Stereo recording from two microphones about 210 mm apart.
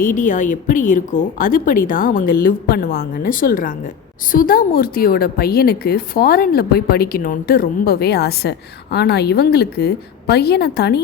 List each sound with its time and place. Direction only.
0.0 s a woman's voice: 40° left (ahead or behind)